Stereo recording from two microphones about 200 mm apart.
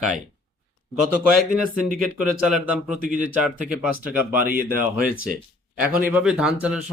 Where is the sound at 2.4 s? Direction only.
5° right (ahead or behind).